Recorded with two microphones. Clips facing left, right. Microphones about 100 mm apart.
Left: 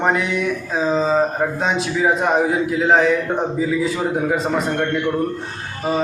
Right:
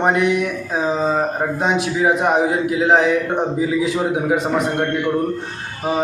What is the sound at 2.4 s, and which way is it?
Speech, 5° right (ahead or behind).